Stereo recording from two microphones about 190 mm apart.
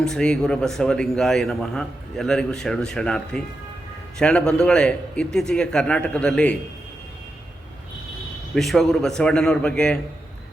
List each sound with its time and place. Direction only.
0.0 s speech: 5° left (ahead or behind)
8.5 s speech: centre (ahead or behind)